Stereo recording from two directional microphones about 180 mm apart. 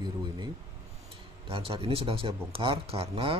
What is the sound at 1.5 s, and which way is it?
Speech, 30° right (ahead or behind).